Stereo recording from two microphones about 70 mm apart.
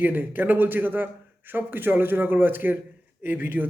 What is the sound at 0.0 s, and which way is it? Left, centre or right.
Speech, right.